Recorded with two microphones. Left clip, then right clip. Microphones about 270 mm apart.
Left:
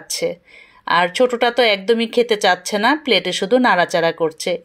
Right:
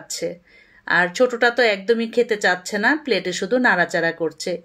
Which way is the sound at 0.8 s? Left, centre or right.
Centre.